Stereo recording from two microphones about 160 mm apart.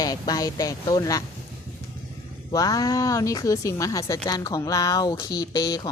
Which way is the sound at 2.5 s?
20° left (ahead or behind).